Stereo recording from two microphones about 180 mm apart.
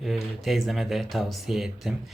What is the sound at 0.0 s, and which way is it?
Speech, centre (ahead or behind).